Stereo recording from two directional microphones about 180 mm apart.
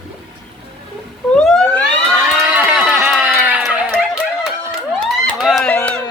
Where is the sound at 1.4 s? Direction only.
5° left (ahead or behind).